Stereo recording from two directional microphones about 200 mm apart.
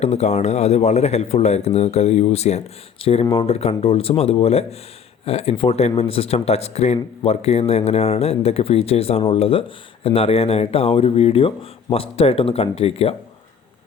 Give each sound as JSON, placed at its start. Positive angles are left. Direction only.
{"t": 0.0, "sound": "speech", "side_deg": 35}